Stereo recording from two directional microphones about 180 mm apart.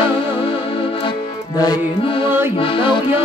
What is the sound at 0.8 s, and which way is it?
Accordion, 25° left (ahead or behind).